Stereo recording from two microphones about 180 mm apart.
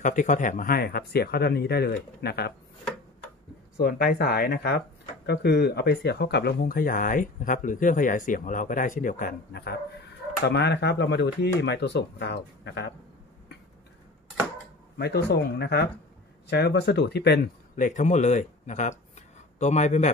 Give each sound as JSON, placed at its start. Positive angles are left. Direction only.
{"t": 0.0, "sound": "speech", "side_deg": 45}
{"t": 3.7, "sound": "speech", "side_deg": 55}
{"t": 15.0, "sound": "a man's voice", "side_deg": 65}